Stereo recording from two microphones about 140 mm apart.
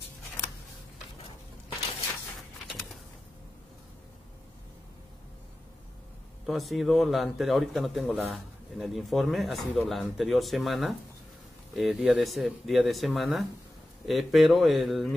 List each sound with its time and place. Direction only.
6.4 s speech: centre (ahead or behind)